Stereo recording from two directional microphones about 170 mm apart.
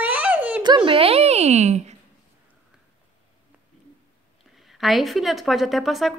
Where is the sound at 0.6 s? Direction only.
25° right (ahead or behind); by 2.0 s 40° right (ahead or behind).